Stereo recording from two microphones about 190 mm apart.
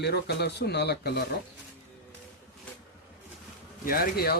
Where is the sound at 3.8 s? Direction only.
50° left (ahead or behind).